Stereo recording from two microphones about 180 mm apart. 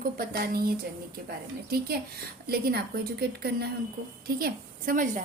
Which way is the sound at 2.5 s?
60° right (ahead or behind).